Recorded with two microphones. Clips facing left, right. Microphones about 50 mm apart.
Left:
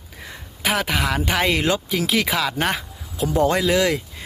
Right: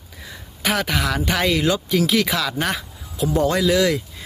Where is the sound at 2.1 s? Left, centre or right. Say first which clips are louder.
Right 1 dB; left.